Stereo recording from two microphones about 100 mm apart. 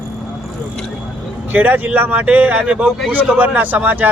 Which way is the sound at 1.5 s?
15° right (ahead or behind).